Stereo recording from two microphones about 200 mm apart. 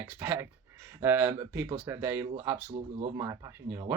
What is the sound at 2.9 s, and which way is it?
Speech, 30° right (ahead or behind).